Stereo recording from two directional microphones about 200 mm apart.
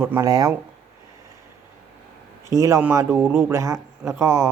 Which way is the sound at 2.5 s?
15° right (ahead or behind).